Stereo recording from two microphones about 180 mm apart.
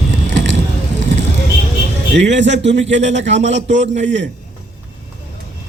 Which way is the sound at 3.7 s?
45° right (ahead or behind).